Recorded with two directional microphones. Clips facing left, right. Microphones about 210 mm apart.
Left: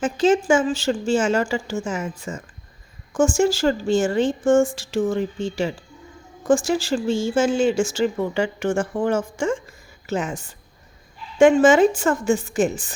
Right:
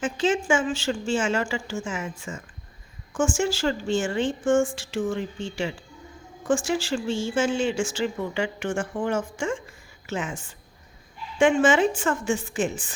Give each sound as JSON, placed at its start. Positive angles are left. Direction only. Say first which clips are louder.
{"t": 0.0, "sound": "a woman's voice", "louder": "left 6 dB", "side_deg": 40}